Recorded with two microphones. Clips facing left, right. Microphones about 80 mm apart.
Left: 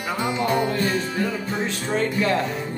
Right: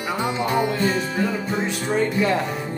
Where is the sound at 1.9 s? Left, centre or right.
Centre.